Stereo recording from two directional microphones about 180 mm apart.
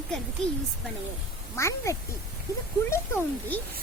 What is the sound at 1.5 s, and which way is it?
Speech, 15° left (ahead or behind).